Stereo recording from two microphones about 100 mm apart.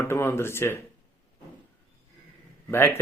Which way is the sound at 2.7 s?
25° left (ahead or behind).